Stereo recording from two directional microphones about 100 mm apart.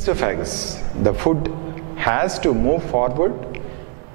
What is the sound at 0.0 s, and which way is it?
Speech, 10° right (ahead or behind).